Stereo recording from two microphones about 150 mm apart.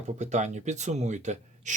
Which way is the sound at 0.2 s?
50° right (ahead or behind).